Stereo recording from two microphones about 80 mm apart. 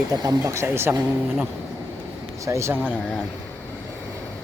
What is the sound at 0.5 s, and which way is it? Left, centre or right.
Speech, right.